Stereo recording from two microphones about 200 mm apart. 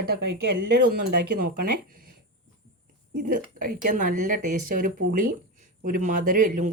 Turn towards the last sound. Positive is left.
turn(degrees=-40)  # may be behind; listen again after turning